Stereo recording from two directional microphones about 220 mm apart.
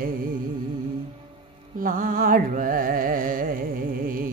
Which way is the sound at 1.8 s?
40° right (ahead or behind).